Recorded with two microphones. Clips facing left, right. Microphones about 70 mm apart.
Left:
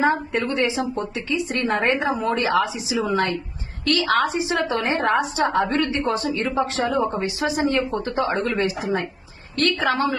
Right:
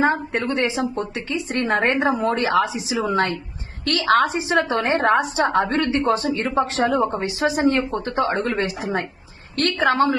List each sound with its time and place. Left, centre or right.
0.0 s a woman's voice: right